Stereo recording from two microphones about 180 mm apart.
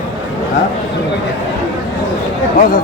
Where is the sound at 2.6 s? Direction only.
50° left (ahead or behind).